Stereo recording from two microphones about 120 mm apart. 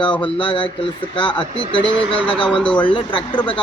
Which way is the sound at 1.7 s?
40° right (ahead or behind).